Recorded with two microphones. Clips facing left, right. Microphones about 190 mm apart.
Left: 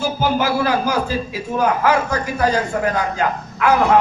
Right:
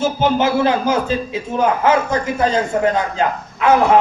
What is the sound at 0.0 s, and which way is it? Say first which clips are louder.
A man's voice: right 3 dB; 20° right (ahead or behind).